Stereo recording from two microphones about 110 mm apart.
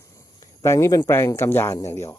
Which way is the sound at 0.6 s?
25° left (ahead or behind).